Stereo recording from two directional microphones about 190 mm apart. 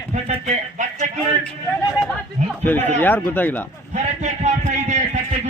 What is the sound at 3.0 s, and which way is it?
Speech, 10° left (ahead or behind).